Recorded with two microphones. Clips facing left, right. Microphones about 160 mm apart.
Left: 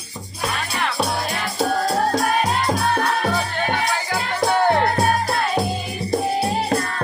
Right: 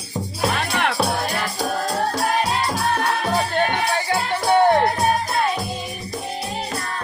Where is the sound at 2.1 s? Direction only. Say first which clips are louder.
Left 1 dB; 50° left (ahead or behind).